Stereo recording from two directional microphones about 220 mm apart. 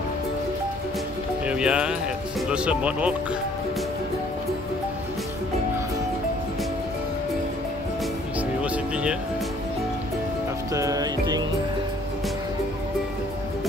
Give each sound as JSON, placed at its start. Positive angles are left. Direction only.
{"t": 1.4, "sound": "speech", "side_deg": -5}
{"t": 8.4, "sound": "music", "side_deg": -5}
{"t": 10.7, "sound": "music", "side_deg": -15}